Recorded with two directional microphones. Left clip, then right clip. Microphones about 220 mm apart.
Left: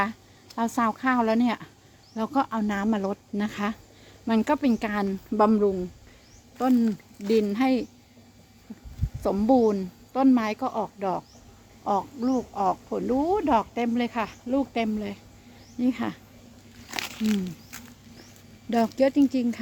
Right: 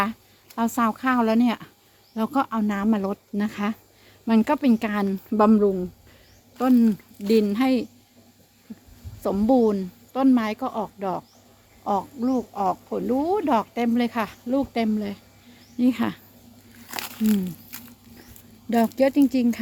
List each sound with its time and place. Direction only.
0.0 s speech: 10° right (ahead or behind)
9.2 s speech: 5° right (ahead or behind); by 16.2 s 25° right (ahead or behind)
16.8 s a sound: 15° right (ahead or behind)
18.7 s speech: 10° right (ahead or behind)